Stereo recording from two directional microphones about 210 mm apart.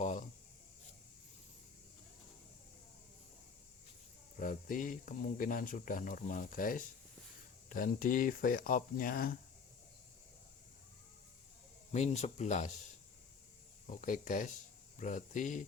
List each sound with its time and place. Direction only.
0.0 s rub: 35° left (ahead or behind)
4.4 s speech: 40° left (ahead or behind)
11.9 s speech: 30° left (ahead or behind)